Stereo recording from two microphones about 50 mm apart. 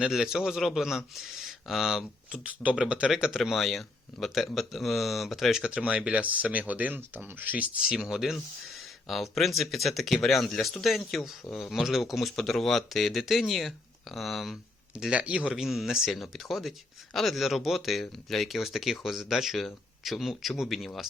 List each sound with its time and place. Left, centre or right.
0.0 s speech: centre
2.4 s speech: right; by 5.6 s centre
5.6 s speech: centre
7.9 s speech: centre
15.1 s speech: right
15.4 s speech: centre